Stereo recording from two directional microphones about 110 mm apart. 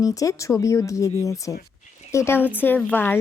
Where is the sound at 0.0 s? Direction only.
30° left (ahead or behind).